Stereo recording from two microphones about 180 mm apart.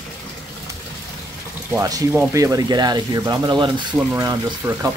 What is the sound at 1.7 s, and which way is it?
Speech, 15° right (ahead or behind).